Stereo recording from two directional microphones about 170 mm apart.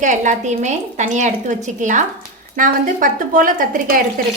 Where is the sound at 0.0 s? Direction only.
45° right (ahead or behind).